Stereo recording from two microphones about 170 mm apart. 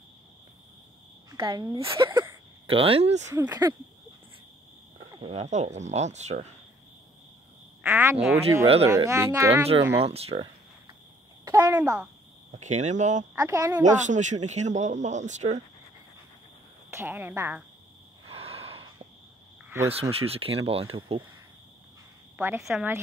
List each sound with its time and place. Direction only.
1.3 s speech: 25° right (ahead or behind)
3.3 s speech: 20° right (ahead or behind)
5.1 s speech: 35° right (ahead or behind)
7.8 s speech: 15° right (ahead or behind)
10.0 s speech: 35° right (ahead or behind)
11.4 s a sound: 20° right (ahead or behind)
11.8 s speech: 5° right (ahead or behind)
12.5 s a man's voice: 45° right (ahead or behind)
13.3 s speech: 20° right (ahead or behind)
13.8 s a man's voice: 45° right (ahead or behind)
16.9 s speech: 15° right (ahead or behind)
18.3 s a sound: 35° right (ahead or behind)
19.9 s speech: 35° right (ahead or behind)
22.6 s speech: centre (ahead or behind)